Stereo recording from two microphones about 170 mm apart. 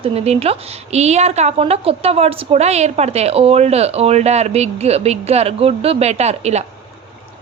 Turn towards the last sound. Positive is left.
turn(degrees=-40)  # may be behind; listen again after turning